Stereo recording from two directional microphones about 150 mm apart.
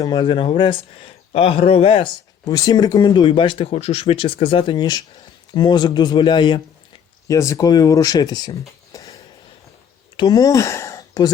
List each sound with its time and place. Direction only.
0.0 s speech: 30° left (ahead or behind)
7.3 s speech: 20° left (ahead or behind)
10.2 s speech: 25° left (ahead or behind)